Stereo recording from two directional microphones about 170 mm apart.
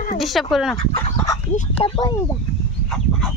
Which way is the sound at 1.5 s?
35° left (ahead or behind).